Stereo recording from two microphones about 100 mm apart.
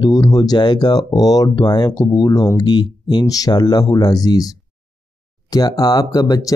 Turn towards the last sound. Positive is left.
turn(degrees=40)  # may be behind; listen again after turning